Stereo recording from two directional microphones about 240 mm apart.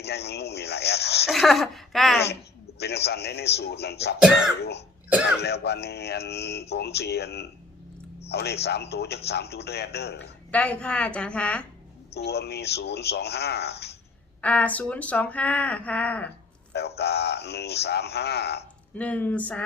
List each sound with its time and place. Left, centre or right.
0.0 s speech: left
1.3 s speech: centre
2.2 s speech: left
4.2 s speech: centre
5.4 s a man's voice: left
10.5 s speech: centre
12.1 s speech: left
14.4 s speech: centre
16.7 s speech: left
18.9 s speech: centre